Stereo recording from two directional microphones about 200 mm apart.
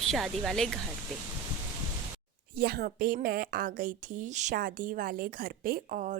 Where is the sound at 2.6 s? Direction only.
50° right (ahead or behind).